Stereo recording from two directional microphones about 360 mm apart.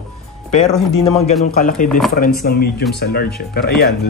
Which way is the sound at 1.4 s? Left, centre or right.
Left.